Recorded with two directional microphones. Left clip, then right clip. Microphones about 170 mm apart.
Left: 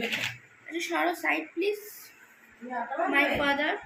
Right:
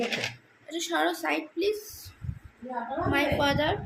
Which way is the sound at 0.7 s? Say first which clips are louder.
Right 1 dB; 20° right (ahead or behind).